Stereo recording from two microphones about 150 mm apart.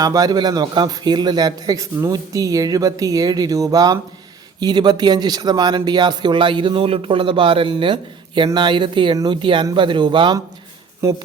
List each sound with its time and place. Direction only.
0.0 s a man's voice: 25° right (ahead or behind)
11.0 s a man's voice: 20° right (ahead or behind)